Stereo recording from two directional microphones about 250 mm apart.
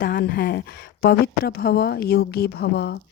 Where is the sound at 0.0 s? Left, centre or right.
Left.